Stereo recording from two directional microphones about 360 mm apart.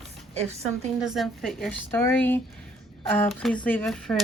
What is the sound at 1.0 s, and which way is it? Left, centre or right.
Speech, centre.